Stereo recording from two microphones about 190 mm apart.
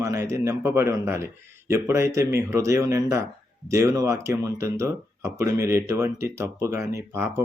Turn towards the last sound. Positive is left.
turn(degrees=-15)  # may be behind; listen again after turning